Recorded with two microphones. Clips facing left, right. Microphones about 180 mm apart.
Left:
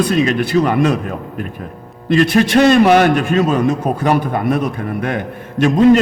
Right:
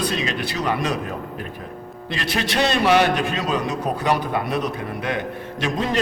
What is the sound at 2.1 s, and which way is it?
A man's voice, 50° left (ahead or behind).